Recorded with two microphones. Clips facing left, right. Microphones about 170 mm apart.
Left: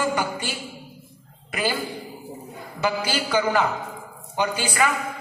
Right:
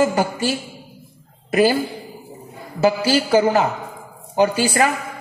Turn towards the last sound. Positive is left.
turn(degrees=-35)  # may be behind; listen again after turning